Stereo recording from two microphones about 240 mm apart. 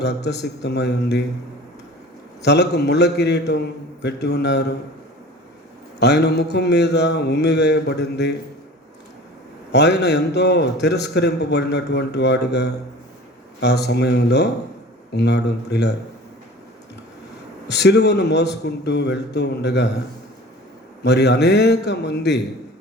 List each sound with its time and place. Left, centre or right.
0.0 s a man's voice: left
2.4 s a man's voice: left
6.0 s a man's voice: left
9.7 s a man's voice: left
17.7 s a man's voice: left
21.0 s a man's voice: left